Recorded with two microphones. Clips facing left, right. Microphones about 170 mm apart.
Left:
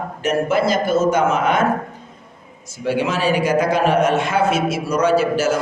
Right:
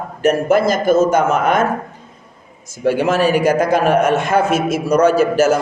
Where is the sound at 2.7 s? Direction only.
45° right (ahead or behind).